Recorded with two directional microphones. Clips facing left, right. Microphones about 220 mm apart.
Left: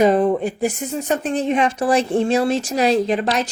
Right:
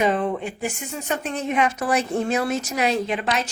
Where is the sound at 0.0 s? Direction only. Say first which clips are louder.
Left 7 dB; 40° left (ahead or behind).